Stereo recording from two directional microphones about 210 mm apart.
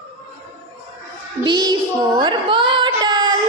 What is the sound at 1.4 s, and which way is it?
Child singing, 20° right (ahead or behind).